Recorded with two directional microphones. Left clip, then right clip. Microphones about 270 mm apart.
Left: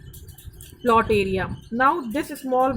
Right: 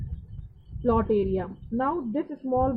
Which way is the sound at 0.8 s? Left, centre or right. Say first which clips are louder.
Left 5 dB; centre.